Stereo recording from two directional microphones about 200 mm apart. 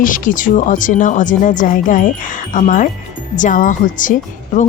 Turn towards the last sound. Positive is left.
turn(degrees=40)  # may be behind; listen again after turning